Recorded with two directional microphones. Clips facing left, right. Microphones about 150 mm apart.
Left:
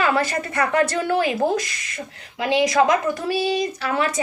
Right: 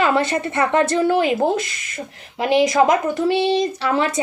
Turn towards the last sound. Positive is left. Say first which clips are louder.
# right 3 dB
turn(degrees=-25)  # may be behind; listen again after turning